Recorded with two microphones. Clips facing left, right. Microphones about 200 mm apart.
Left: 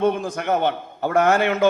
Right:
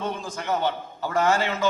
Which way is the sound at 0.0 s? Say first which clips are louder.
Left 9 dB; 55° left (ahead or behind).